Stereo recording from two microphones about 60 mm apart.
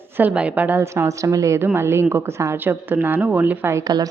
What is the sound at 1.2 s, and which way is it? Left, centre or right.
Speech, right.